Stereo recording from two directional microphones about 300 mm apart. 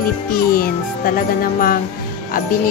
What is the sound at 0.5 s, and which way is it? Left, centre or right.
Speech, left.